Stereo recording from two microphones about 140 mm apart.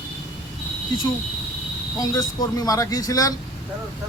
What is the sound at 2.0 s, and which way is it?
A man's voice, 25° left (ahead or behind).